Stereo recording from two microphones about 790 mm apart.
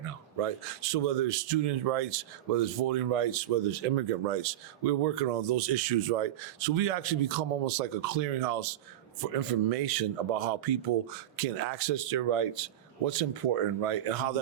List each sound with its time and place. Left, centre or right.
0.0 s a man's voice: right